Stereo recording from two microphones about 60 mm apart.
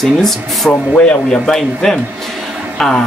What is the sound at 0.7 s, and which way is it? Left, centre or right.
A woman's voice, left.